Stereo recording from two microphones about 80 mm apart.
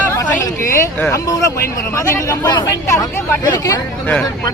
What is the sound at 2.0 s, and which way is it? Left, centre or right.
Speech, left.